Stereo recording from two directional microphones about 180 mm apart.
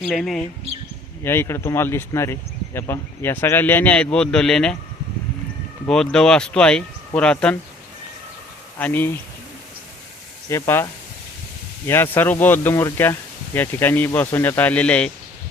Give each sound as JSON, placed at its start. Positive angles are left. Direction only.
{"t": 0.0, "sound": "speech", "side_deg": 0}
{"t": 1.2, "sound": "speech", "side_deg": 15}
{"t": 5.9, "sound": "speech", "side_deg": 5}
{"t": 8.8, "sound": "speech", "side_deg": 10}
{"t": 10.5, "sound": "speech", "side_deg": 15}
{"t": 11.9, "sound": "speech", "side_deg": 10}